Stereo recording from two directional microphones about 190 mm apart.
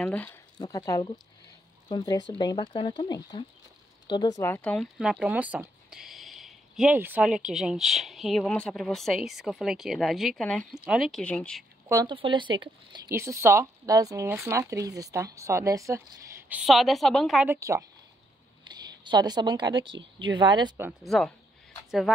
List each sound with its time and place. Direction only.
0.0 s speech: 5° left (ahead or behind)
0.6 s speech: 20° left (ahead or behind)
11.9 s a woman's voice: 15° right (ahead or behind)
13.1 s speech: 15° right (ahead or behind)
16.4 s speech: 5° right (ahead or behind)
17.6 s a woman's voice: 15° right (ahead or behind)
21.0 s speech: centre (ahead or behind)